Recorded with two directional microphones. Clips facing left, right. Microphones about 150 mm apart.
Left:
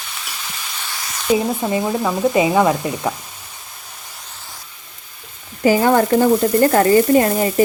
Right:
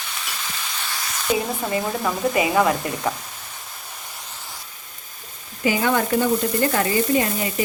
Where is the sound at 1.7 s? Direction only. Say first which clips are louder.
Left 2 dB; 15° left (ahead or behind).